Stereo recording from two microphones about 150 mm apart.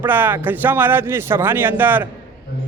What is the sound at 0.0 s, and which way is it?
A man's voice, 15° right (ahead or behind).